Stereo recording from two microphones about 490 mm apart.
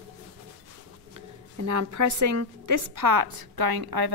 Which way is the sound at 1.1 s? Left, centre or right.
Right.